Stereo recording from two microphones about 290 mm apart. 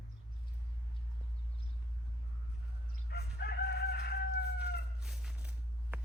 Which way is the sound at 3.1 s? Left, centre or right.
Left.